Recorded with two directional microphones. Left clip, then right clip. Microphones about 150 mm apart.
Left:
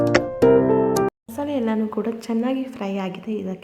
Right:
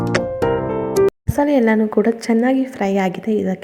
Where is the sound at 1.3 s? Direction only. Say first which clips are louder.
Right 10 dB; 35° right (ahead or behind).